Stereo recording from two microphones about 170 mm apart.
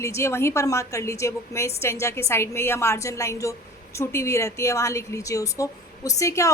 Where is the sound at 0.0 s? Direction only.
15° left (ahead or behind).